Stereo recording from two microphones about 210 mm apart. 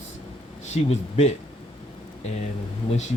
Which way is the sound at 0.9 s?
30° left (ahead or behind).